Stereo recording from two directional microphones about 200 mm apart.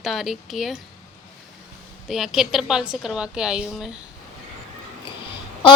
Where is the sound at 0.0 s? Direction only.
Centre (ahead or behind).